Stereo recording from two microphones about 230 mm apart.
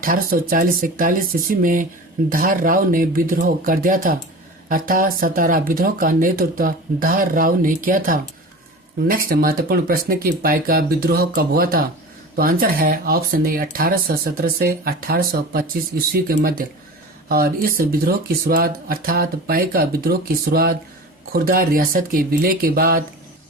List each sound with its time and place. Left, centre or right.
0.0 s speech: right